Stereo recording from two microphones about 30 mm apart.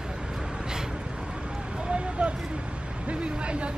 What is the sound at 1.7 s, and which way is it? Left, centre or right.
Vehicle, right.